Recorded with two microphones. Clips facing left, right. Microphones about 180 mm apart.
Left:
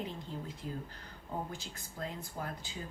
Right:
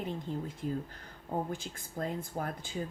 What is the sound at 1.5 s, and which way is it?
Speech, 50° right (ahead or behind).